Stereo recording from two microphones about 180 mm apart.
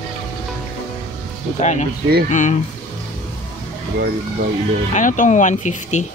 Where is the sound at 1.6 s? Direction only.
40° left (ahead or behind).